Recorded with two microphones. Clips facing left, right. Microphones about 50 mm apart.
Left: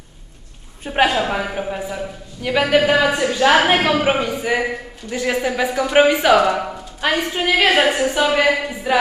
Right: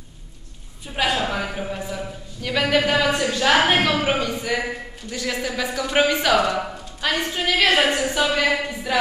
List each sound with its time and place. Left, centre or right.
0.8 s a woman's voice: left
1.2 s a man's voice: left